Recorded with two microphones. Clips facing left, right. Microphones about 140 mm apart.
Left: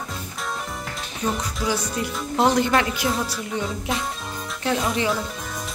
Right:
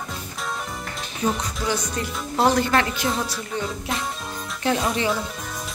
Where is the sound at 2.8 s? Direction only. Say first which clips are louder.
Even; 5° left (ahead or behind).